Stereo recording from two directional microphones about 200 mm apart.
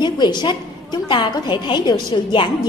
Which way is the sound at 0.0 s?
20° left (ahead or behind).